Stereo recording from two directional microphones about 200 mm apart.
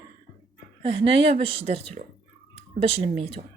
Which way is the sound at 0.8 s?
25° right (ahead or behind).